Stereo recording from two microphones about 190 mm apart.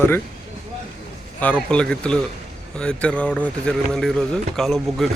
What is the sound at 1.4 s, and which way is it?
Speech, 5° left (ahead or behind).